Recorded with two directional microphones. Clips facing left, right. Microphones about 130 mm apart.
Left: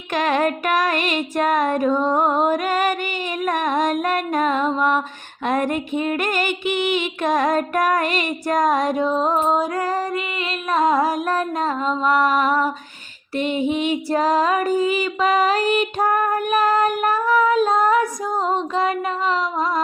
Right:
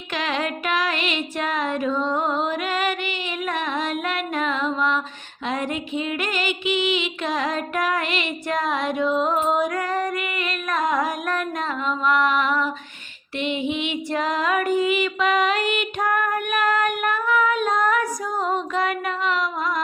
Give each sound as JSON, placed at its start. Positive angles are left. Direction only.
{"t": 0.1, "sound": "music", "side_deg": 50}
{"t": 5.5, "sound": "female singing", "side_deg": 50}